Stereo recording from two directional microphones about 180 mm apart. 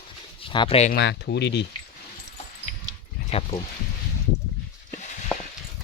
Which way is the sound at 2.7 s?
40° left (ahead or behind).